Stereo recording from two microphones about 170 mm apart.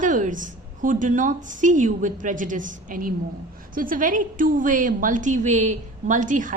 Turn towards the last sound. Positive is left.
turn(degrees=-50)  # may be behind; listen again after turning